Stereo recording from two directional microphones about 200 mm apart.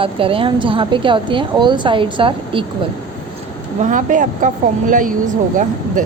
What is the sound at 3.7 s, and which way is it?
A woman's voice, 40° right (ahead or behind).